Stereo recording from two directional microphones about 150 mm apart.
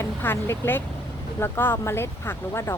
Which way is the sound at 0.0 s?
15° left (ahead or behind).